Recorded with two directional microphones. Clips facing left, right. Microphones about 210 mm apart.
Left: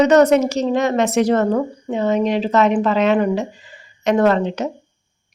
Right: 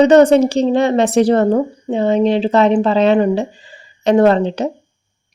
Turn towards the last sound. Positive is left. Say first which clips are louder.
# right 4 dB
turn(degrees=-30)  # may be behind; listen again after turning